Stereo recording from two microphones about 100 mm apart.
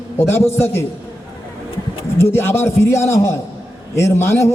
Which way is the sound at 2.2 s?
25° left (ahead or behind).